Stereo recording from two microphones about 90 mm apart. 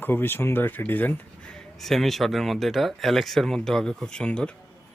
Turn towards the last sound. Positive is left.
turn(degrees=10)  # may be behind; listen again after turning